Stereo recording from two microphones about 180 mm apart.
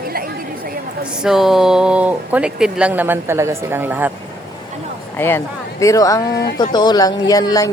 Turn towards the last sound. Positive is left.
turn(degrees=20)  # may be behind; listen again after turning